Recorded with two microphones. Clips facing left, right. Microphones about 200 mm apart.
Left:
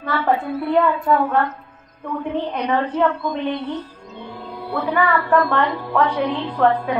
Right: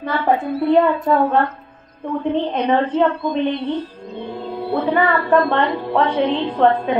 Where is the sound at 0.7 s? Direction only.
25° right (ahead or behind).